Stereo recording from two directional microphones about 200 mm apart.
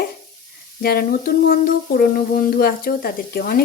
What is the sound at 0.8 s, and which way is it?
Frying, 50° left (ahead or behind).